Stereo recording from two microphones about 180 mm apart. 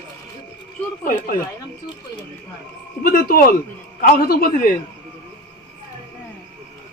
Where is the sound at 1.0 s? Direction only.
50° left (ahead or behind).